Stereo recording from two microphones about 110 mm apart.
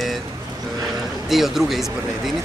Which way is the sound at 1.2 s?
Centre (ahead or behind).